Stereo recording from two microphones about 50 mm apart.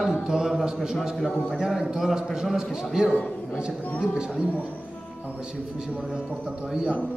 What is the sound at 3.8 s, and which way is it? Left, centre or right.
Music, left.